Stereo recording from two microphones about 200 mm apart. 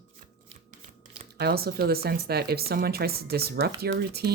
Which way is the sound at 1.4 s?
50° right (ahead or behind).